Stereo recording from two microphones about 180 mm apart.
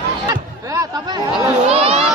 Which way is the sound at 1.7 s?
35° right (ahead or behind).